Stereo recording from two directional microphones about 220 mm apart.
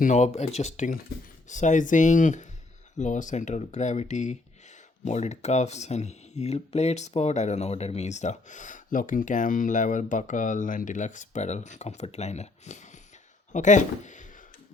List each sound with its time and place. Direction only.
0.0 s speech: 35° left (ahead or behind)